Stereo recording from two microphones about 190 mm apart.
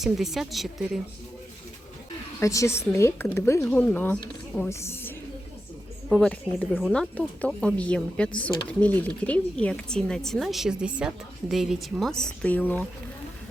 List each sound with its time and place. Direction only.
0.0 s speech: centre (ahead or behind)
2.4 s speech: 15° left (ahead or behind)
6.1 s speech: 5° left (ahead or behind)